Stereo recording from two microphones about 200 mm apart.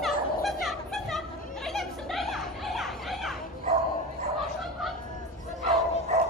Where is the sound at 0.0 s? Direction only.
Centre (ahead or behind).